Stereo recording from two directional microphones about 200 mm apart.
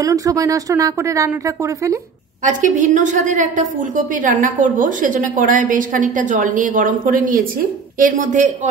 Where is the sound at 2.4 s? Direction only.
40° right (ahead or behind).